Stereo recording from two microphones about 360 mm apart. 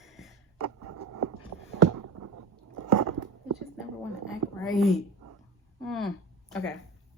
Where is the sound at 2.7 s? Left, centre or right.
Right.